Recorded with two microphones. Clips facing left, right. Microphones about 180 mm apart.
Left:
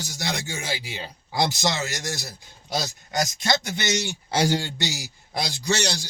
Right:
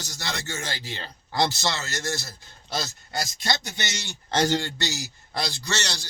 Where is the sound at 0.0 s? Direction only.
15° left (ahead or behind).